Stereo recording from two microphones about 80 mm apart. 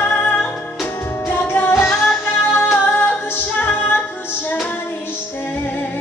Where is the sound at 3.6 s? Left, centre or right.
Left.